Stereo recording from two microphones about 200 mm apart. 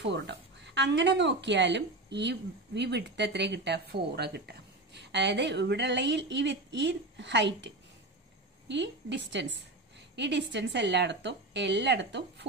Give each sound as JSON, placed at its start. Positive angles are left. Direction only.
{"t": 0.0, "sound": "speech", "side_deg": -60}